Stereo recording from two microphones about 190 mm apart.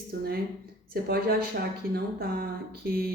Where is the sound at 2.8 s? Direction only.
50° right (ahead or behind).